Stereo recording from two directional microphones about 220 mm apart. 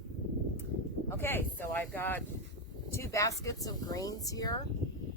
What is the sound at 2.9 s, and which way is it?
Speech, 15° left (ahead or behind).